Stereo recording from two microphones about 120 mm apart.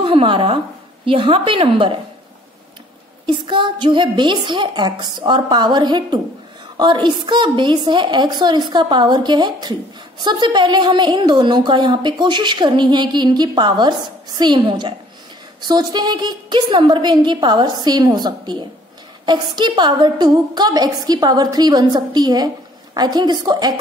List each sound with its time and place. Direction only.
0.0 s a woman's voice: 45° right (ahead or behind)
3.3 s a woman's voice: 40° right (ahead or behind)